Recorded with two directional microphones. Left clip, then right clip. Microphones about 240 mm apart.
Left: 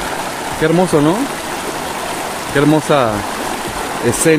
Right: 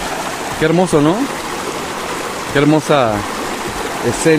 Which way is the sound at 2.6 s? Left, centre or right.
Centre.